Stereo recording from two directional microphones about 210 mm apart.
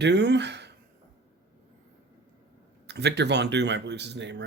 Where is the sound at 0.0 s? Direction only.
55° right (ahead or behind).